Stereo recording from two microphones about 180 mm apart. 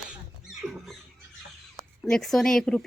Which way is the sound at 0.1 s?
5° right (ahead or behind).